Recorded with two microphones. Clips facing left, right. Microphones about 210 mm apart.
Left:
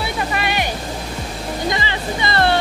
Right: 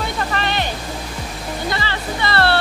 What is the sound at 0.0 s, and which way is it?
Music, 10° left (ahead or behind).